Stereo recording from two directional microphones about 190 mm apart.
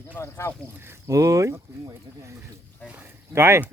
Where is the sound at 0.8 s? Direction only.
15° right (ahead or behind).